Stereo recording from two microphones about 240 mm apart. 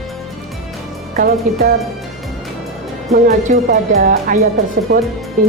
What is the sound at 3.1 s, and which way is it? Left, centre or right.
Speech, right.